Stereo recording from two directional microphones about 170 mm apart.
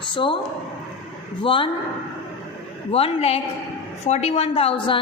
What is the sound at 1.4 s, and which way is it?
Speech, 30° left (ahead or behind).